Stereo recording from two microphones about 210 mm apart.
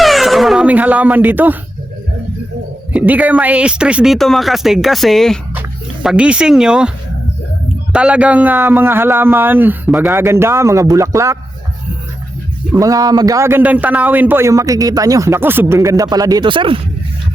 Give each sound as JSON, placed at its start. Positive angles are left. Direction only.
{"t": 0.0, "sound": "a sound", "side_deg": 0}
{"t": 2.9, "sound": "speech", "side_deg": -5}
{"t": 7.9, "sound": "a man's voice", "side_deg": -5}
{"t": 12.7, "sound": "a man's voice", "side_deg": -15}